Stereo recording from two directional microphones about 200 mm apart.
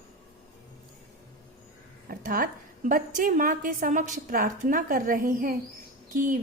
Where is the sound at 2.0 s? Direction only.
45° right (ahead or behind).